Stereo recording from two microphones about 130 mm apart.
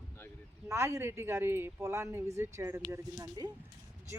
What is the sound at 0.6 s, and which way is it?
Speech, 20° right (ahead or behind).